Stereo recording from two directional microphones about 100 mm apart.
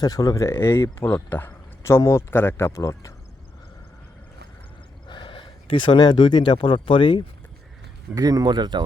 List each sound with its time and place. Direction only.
0.0 s speech: 40° left (ahead or behind)
5.0 s speech: 50° left (ahead or behind)
8.1 s speech: 40° right (ahead or behind)